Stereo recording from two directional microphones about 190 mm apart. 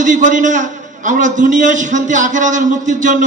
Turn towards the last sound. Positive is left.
turn(degrees=-40)  # may be behind; listen again after turning